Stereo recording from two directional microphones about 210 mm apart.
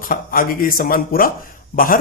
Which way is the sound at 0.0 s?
40° left (ahead or behind).